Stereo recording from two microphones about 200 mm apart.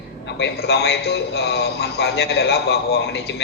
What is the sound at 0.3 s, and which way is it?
A man's voice, 60° left (ahead or behind).